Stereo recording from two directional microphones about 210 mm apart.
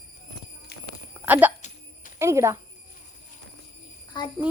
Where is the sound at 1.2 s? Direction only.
10° right (ahead or behind).